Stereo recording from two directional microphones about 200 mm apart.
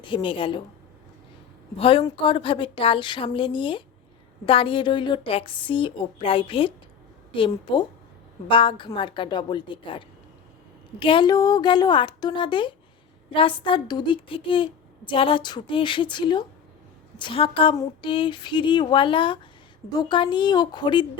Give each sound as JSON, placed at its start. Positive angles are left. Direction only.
{"t": 0.1, "sound": "speech", "side_deg": 25}
{"t": 1.8, "sound": "speech", "side_deg": 25}
{"t": 11.0, "sound": "speech", "side_deg": 25}